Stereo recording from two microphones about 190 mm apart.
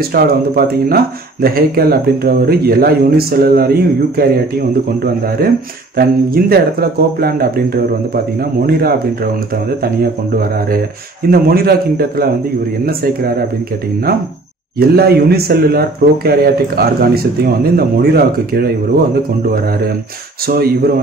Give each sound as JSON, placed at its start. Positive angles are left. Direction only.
{"t": 0.0, "sound": "speech", "side_deg": -50}
{"t": 10.3, "sound": "speech", "side_deg": -50}
{"t": 14.8, "sound": "speech", "side_deg": -55}
{"t": 20.4, "sound": "speech", "side_deg": -50}